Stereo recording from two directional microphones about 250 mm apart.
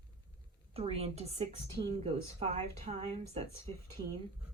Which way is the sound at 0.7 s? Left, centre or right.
Right.